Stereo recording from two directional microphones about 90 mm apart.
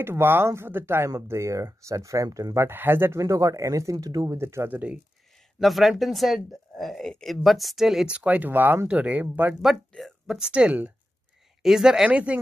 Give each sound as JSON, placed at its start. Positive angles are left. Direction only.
{"t": 0.0, "sound": "speech", "side_deg": -25}
{"t": 2.5, "sound": "speech", "side_deg": -25}
{"t": 3.2, "sound": "speech", "side_deg": -40}
{"t": 4.4, "sound": "speech", "side_deg": -30}
{"t": 5.6, "sound": "speech", "side_deg": 0}
{"t": 9.6, "sound": "speech", "side_deg": 0}